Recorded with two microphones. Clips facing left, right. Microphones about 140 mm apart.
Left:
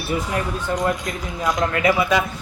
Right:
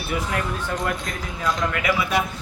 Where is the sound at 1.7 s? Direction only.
35° left (ahead or behind).